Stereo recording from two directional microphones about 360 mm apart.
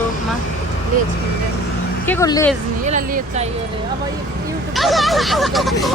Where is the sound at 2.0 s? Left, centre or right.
Centre.